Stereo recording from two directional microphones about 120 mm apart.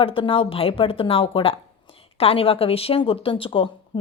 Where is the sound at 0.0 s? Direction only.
45° left (ahead or behind).